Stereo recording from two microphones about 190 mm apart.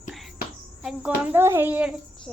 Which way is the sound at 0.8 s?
5° right (ahead or behind).